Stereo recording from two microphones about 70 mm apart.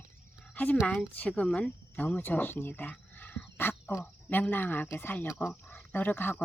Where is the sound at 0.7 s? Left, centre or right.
Centre.